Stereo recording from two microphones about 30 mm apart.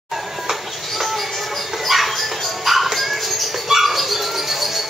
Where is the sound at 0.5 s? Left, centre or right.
Centre.